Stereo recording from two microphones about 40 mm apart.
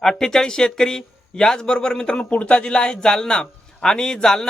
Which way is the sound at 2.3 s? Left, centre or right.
Left.